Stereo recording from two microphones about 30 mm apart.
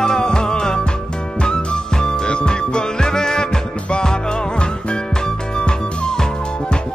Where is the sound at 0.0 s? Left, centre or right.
Left.